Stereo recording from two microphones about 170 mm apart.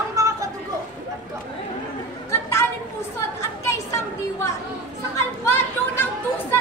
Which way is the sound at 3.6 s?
15° left (ahead or behind).